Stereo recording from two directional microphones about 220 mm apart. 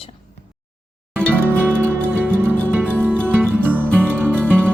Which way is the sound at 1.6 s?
10° right (ahead or behind).